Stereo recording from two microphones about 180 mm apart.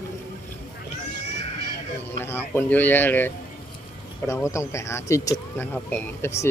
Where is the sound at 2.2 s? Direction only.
15° left (ahead or behind).